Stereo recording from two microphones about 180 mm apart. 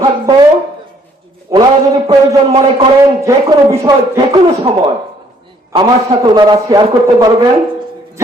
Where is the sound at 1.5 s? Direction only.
20° right (ahead or behind).